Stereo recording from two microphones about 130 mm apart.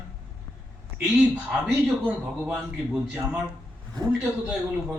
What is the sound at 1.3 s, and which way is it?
Speech, 5° right (ahead or behind).